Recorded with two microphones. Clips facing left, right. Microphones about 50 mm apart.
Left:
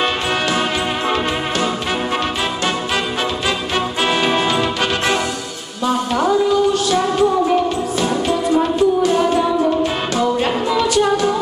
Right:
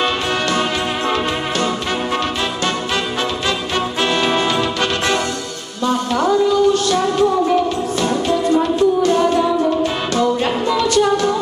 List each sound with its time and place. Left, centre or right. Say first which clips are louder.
0.0 s music: even; centre
4.0 s music: even; centre